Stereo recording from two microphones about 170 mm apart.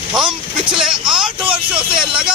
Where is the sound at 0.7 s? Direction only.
5° right (ahead or behind).